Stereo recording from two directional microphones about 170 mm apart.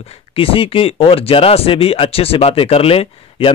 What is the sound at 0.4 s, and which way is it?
Speech, 35° left (ahead or behind).